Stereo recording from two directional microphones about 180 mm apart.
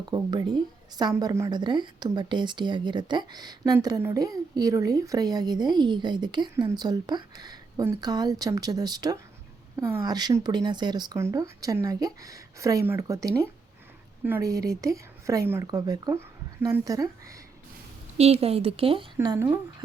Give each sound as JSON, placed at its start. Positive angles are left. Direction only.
{"t": 0.1, "sound": "a woman's voice", "side_deg": -25}
{"t": 18.2, "sound": "speech", "side_deg": -35}
{"t": 19.1, "sound": "a woman's voice", "side_deg": -20}